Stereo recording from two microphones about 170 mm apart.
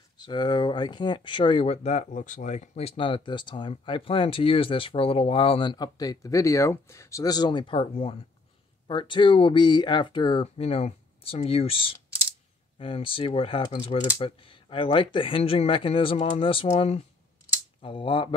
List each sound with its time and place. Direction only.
0.2 s speech: 25° left (ahead or behind)